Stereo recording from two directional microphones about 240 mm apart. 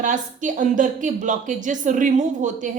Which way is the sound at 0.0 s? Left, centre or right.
Right.